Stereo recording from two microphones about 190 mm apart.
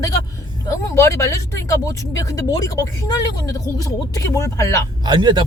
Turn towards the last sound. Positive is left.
turn(degrees=-25)  # may be behind; listen again after turning